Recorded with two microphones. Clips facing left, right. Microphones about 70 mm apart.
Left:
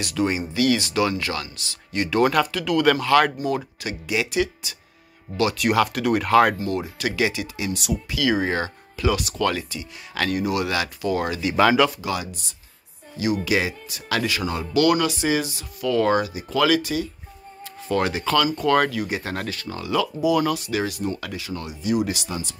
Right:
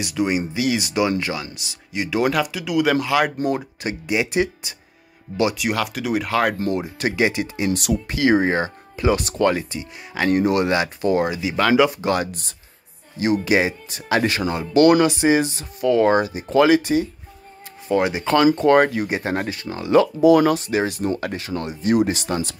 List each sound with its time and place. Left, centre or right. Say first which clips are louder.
0.0 s speech: right 2 dB; centre
3.4 s speech: right 2 dB; right
5.6 s speech: left 3 dB; centre
7.0 s speech: right 4 dB; right
7.7 s speech: right 4 dB; right
8.1 s speech: right 5 dB; right
10.3 s speech: right 6 dB; right
11.4 s speech: left 4 dB; centre
11.9 s speech: right 6 dB; right
17.8 s speech: right 3 dB; centre
18.2 s speech: right 5 dB; right
19.9 s speech: right 8 dB; right
22.3 s speech: right 7 dB; right